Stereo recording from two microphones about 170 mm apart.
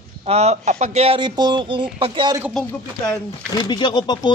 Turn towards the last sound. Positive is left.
turn(degrees=25)  # may be behind; listen again after turning